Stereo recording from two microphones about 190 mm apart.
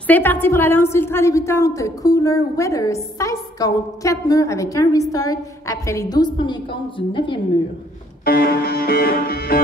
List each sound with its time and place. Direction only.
0.0 s a woman's voice: 10° left (ahead or behind); by 7.3 s 25° left (ahead or behind)
8.3 s music: 55° left (ahead or behind)